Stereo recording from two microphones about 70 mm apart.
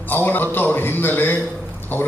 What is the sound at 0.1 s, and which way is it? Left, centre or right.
A man's voice, left.